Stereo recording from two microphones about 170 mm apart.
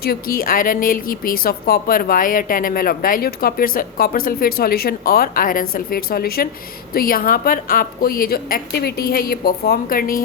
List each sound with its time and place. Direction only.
0.0 s a woman's voice: 60° left (ahead or behind)